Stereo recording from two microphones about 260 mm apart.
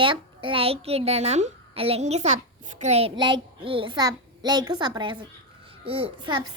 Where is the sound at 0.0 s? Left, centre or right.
Centre.